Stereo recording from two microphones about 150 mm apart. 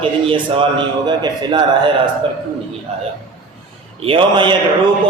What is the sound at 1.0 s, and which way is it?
Speech, 30° right (ahead or behind).